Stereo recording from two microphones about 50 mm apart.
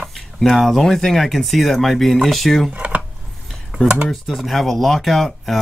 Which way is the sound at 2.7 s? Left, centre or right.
Right.